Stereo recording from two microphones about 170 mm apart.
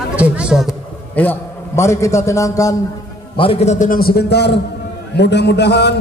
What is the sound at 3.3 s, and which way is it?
A man's voice, 35° left (ahead or behind).